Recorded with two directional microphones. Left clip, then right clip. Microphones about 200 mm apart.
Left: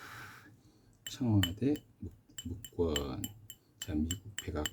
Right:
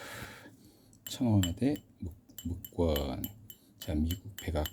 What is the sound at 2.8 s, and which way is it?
Speech, 20° right (ahead or behind).